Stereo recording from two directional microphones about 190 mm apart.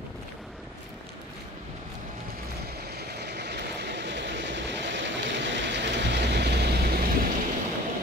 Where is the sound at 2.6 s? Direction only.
55° right (ahead or behind).